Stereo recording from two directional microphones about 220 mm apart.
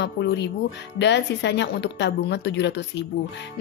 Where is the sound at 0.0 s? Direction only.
50° left (ahead or behind).